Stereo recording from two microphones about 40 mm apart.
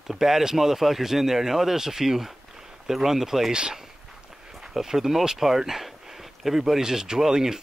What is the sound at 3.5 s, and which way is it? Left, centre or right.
Speech, right.